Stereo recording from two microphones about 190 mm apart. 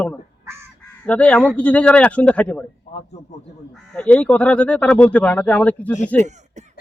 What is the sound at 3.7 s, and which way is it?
Speech, 5° left (ahead or behind).